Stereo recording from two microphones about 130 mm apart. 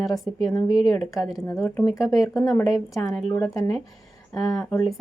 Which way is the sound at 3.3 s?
20° left (ahead or behind).